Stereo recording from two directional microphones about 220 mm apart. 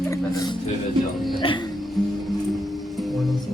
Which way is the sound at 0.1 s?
15° left (ahead or behind).